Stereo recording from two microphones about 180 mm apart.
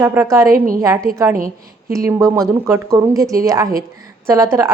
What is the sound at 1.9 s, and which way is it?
A woman's voice, 15° right (ahead or behind).